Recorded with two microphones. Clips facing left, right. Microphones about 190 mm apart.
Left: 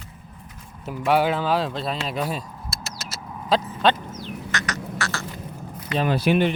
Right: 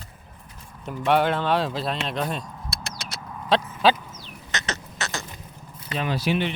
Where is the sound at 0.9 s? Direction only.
5° left (ahead or behind).